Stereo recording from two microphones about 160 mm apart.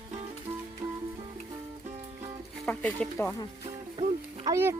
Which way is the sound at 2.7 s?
5° left (ahead or behind).